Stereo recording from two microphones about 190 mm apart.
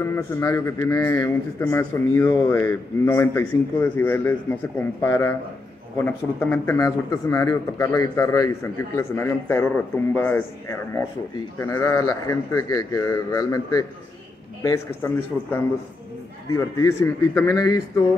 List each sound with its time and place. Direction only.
0.0 s a man's voice: 15° left (ahead or behind)